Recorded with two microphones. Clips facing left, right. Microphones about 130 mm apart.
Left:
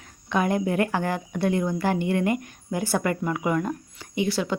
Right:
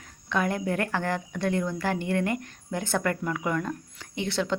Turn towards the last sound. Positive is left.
turn(degrees=5)  # may be behind; listen again after turning